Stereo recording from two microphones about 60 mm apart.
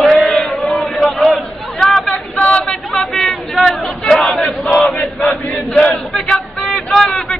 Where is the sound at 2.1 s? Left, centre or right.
Left.